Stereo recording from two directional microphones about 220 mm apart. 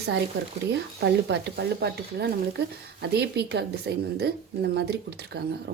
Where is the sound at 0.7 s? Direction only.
50° right (ahead or behind).